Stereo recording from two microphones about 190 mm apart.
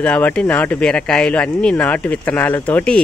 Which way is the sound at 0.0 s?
5° left (ahead or behind).